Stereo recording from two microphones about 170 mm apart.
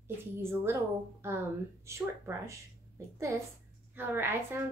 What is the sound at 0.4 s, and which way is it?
Speech, 15° right (ahead or behind).